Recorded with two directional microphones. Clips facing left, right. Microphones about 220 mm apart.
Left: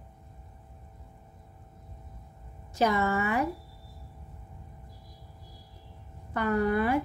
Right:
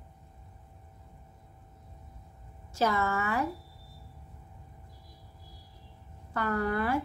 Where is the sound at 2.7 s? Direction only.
15° left (ahead or behind).